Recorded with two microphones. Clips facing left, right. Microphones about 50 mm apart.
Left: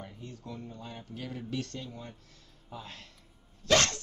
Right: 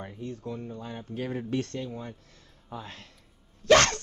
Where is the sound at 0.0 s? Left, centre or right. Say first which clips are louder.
Right 7 dB; right.